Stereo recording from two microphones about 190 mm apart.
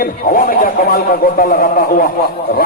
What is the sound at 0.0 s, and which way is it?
A man's voice, 50° left (ahead or behind).